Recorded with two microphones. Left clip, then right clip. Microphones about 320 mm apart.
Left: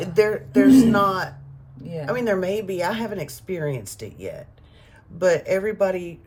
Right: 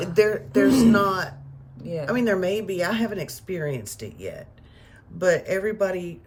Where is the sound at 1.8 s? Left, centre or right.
Centre.